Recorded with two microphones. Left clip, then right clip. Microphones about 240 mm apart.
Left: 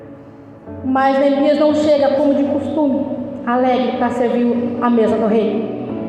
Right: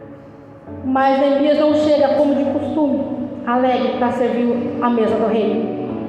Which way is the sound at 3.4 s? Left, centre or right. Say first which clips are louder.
Left 1 dB; left.